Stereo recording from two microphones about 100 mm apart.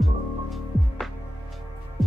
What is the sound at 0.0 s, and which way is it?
Music, centre (ahead or behind).